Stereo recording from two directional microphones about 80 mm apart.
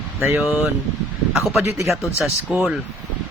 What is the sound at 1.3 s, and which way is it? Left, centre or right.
Speech, centre.